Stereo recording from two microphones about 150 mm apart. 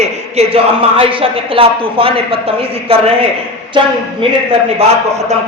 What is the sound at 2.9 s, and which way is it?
Speech, 40° right (ahead or behind).